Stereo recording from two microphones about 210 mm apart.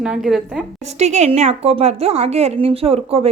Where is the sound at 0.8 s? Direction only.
35° right (ahead or behind).